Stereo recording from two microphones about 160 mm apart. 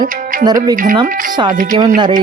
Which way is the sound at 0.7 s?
55° right (ahead or behind).